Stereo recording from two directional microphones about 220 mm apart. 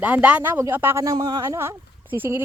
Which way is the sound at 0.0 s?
5° right (ahead or behind).